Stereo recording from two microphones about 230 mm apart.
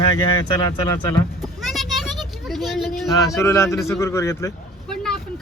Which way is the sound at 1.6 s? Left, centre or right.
Centre.